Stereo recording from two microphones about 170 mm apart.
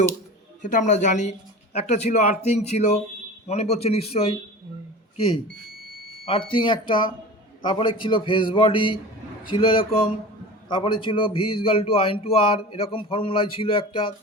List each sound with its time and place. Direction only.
0.6 s a man's voice: 45° left (ahead or behind); by 5.4 s 30° left (ahead or behind)
6.5 s a man's voice: 30° left (ahead or behind)